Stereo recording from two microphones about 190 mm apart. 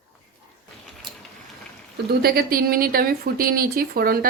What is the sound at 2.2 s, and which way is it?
A woman's voice, 50° right (ahead or behind).